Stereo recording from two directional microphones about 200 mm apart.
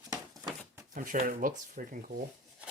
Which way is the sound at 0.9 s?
45° right (ahead or behind).